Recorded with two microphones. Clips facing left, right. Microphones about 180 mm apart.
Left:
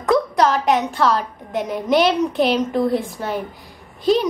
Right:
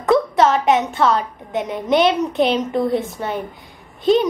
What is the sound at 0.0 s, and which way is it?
A woman's voice, centre (ahead or behind).